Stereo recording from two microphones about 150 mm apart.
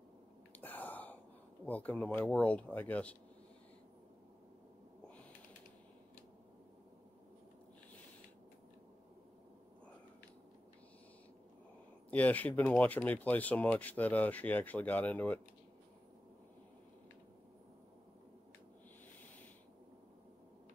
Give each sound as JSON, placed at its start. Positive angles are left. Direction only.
{"t": 0.6, "sound": "a sound", "side_deg": 10}
{"t": 1.7, "sound": "speech", "side_deg": 10}
{"t": 12.1, "sound": "speech", "side_deg": 10}